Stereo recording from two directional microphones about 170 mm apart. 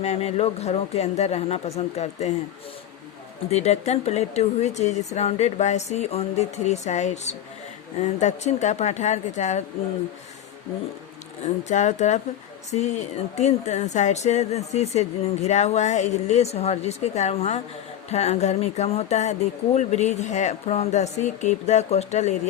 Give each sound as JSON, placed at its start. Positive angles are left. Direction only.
{"t": 0.0, "sound": "speech", "side_deg": 40}
{"t": 3.5, "sound": "speech", "side_deg": 40}
{"t": 11.4, "sound": "speech", "side_deg": 45}